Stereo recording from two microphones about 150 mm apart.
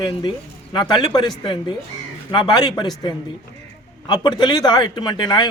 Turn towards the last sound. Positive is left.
turn(degrees=30)  # may be behind; listen again after turning